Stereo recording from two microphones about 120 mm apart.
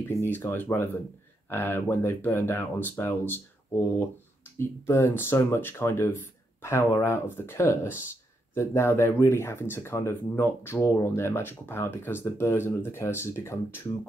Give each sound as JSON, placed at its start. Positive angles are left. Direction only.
{"t": 0.1, "sound": "speech", "side_deg": 20}
{"t": 4.6, "sound": "speech", "side_deg": 20}